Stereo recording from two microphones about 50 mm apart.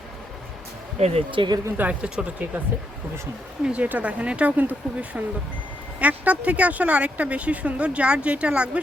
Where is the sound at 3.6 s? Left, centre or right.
Right.